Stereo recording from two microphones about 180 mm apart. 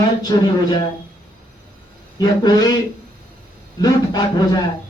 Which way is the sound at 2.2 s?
20° left (ahead or behind).